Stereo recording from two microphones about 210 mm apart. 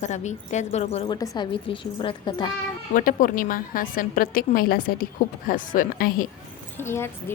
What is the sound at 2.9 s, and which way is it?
A woman's voice, 40° left (ahead or behind).